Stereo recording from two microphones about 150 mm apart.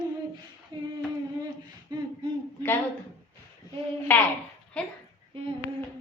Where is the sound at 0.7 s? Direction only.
30° right (ahead or behind).